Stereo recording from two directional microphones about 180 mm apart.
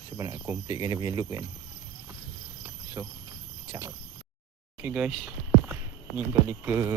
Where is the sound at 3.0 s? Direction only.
15° right (ahead or behind).